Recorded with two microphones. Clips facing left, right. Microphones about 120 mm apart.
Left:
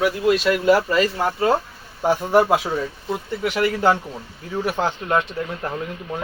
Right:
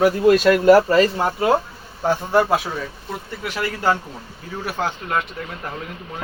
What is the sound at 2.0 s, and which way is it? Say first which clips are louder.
A man's voice: left 1 dB; 15° left (ahead or behind).